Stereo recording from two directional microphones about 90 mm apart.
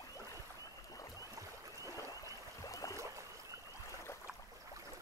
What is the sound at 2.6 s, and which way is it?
Boat, 40° left (ahead or behind).